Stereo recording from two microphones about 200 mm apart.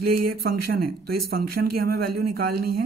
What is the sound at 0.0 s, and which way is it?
Speech, 50° right (ahead or behind).